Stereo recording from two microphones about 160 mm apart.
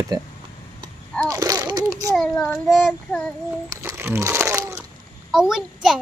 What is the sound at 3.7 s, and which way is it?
Speech, 20° right (ahead or behind).